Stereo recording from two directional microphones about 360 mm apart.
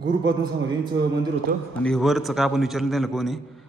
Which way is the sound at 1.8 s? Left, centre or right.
Centre.